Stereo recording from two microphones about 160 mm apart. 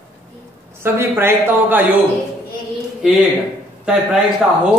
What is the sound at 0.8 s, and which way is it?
A man's voice, 15° right (ahead or behind).